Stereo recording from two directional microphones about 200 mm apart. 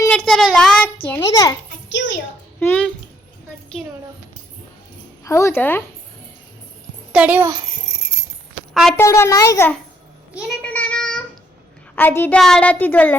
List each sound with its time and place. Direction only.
0.0 s a sound: 5° left (ahead or behind)
1.0 s a child's voice: 15° left (ahead or behind)
2.6 s a sound: 10° left (ahead or behind)
5.2 s a woman's voice: 15° left (ahead or behind)
7.1 s a child's voice: 5° right (ahead or behind)
8.7 s a woman's voice: centre (ahead or behind)
9.0 s a child's voice: 15° left (ahead or behind)
10.3 s a sound: 5° right (ahead or behind)
10.7 s child singing: 5° left (ahead or behind)
11.9 s a child's voice: 10° left (ahead or behind)